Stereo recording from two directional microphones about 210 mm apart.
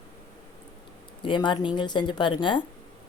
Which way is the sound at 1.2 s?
20° left (ahead or behind).